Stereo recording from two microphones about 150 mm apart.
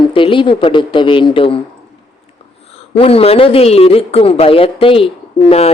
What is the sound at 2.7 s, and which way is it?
Speech, 40° left (ahead or behind).